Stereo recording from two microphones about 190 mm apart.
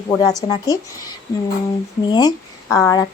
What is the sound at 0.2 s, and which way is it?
Speech, 20° left (ahead or behind).